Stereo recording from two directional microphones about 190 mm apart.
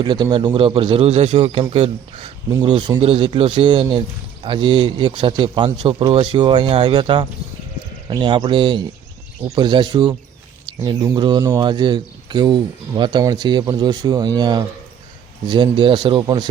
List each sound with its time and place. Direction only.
0.0 s speech: 25° right (ahead or behind)